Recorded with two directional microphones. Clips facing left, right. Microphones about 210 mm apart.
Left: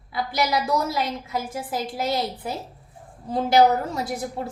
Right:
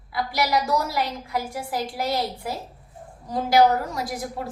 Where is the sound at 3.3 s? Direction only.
25° left (ahead or behind).